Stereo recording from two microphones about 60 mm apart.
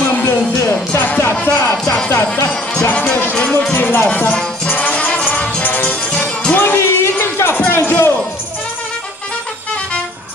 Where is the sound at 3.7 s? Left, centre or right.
Left.